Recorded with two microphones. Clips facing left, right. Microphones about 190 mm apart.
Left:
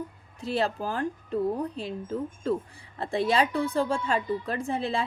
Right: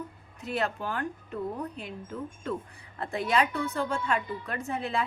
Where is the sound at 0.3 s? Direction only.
30° left (ahead or behind).